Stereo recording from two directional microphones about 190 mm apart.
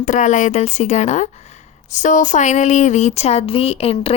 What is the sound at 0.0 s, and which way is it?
Speech, 40° left (ahead or behind).